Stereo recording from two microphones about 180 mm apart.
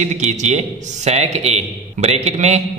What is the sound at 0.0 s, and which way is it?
A man's voice, 40° right (ahead or behind).